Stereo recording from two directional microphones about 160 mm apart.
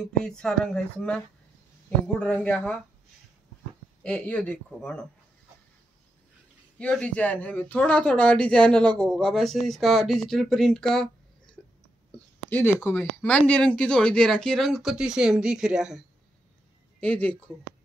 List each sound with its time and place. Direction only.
0.0 s speech: 5° left (ahead or behind)
2.1 s speech: 10° left (ahead or behind)
4.0 s speech: 5° left (ahead or behind)
6.8 s speech: 5° left (ahead or behind)
17.0 s speech: 10° left (ahead or behind)